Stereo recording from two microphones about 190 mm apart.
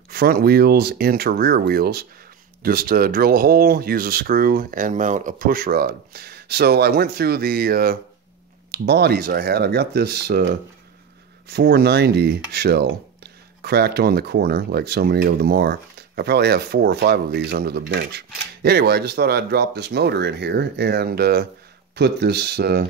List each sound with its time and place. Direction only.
0.1 s speech: 55° right (ahead or behind)